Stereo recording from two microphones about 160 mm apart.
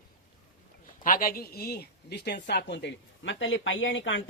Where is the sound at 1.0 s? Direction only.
60° left (ahead or behind); by 3.4 s 90° left.